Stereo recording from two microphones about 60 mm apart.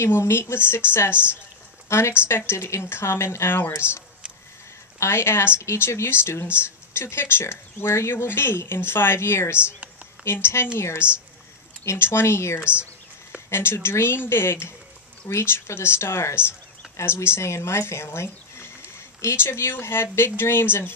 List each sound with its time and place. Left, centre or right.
0.0 s speech: left
5.0 s speech: left